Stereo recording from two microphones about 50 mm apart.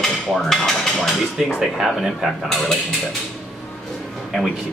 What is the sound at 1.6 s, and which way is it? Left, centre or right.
Speech, centre.